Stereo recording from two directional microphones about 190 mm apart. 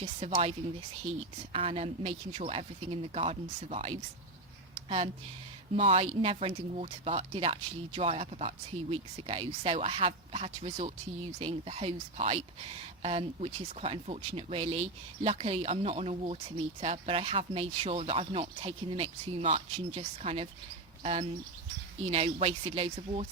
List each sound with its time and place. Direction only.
0.0 s speech: 30° right (ahead or behind)
1.5 s speech: 30° right (ahead or behind)
5.7 s speech: 30° right (ahead or behind)